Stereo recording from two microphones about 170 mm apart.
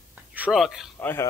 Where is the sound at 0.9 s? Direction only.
10° left (ahead or behind).